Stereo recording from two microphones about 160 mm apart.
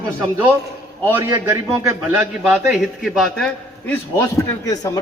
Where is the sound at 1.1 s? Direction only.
10° right (ahead or behind).